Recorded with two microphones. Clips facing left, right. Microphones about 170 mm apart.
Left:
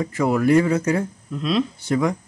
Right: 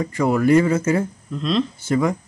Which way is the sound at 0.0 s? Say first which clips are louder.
Right 1 dB; centre (ahead or behind).